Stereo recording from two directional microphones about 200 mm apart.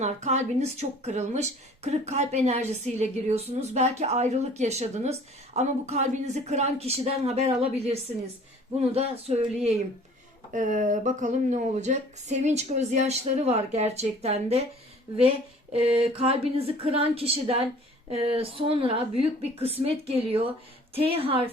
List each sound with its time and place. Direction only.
0.0 s speech: 35° right (ahead or behind)
9.0 s speech: 30° right (ahead or behind)
15.7 s a woman's voice: 25° right (ahead or behind)